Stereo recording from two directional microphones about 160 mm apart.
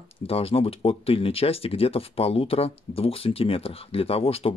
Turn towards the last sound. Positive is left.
turn(degrees=35)  # may be behind; listen again after turning